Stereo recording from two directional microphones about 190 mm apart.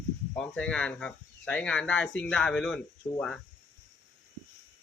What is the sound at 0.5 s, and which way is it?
Speech, 5° left (ahead or behind).